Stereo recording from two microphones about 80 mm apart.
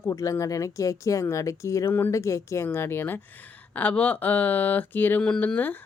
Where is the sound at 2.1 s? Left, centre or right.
Left.